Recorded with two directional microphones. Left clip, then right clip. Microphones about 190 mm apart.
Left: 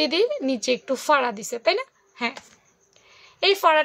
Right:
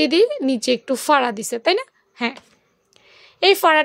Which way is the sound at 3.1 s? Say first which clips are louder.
Right 5 dB; 35° right (ahead or behind).